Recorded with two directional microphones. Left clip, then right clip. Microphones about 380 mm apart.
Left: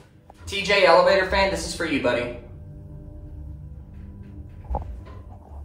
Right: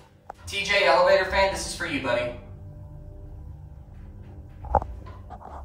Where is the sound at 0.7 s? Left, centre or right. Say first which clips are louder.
Left 3 dB; centre.